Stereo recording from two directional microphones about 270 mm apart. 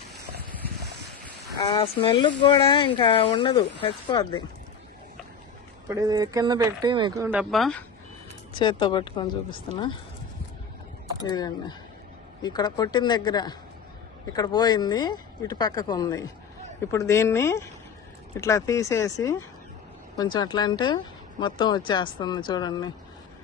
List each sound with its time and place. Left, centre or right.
1.5 s speech: centre
5.9 s speech: centre
8.5 s speech: centre
11.2 s speech: centre